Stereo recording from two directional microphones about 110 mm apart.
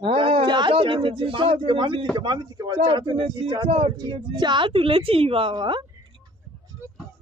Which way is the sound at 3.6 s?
55° right (ahead or behind).